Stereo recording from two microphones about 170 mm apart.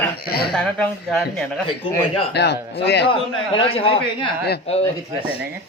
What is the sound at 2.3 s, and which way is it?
Speech, 80° left.